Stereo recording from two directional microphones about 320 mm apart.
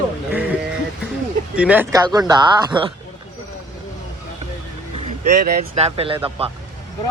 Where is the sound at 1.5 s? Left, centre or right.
Centre.